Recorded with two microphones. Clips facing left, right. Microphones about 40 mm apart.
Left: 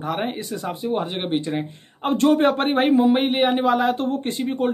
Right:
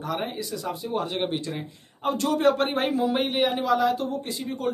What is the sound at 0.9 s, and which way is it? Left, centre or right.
A man's voice, left.